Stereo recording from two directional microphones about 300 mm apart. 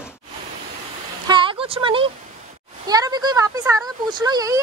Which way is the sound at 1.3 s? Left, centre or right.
Centre.